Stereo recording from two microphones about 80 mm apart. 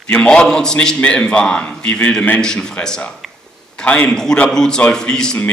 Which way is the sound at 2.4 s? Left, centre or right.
Centre.